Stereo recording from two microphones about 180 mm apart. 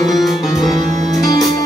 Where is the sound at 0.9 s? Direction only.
40° right (ahead or behind).